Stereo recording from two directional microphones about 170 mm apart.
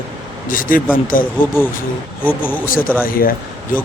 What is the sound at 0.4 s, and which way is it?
Speech, 55° left (ahead or behind).